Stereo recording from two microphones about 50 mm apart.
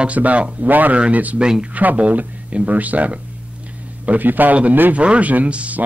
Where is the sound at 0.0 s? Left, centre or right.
Right.